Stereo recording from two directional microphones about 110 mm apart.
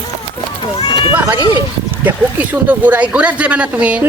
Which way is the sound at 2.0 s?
15° right (ahead or behind).